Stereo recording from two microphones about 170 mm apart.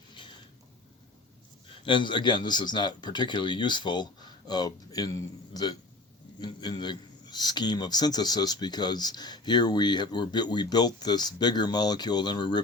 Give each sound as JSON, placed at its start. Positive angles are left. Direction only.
{"t": 0.1, "sound": "a sound", "side_deg": 25}
{"t": 1.6, "sound": "a man's voice", "side_deg": 30}
{"t": 6.4, "sound": "a man's voice", "side_deg": 25}